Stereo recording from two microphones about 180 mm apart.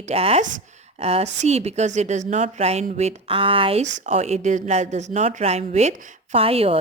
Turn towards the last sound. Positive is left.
turn(degrees=-35)  # may be behind; listen again after turning